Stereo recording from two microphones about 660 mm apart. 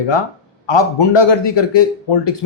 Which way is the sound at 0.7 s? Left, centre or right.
Left.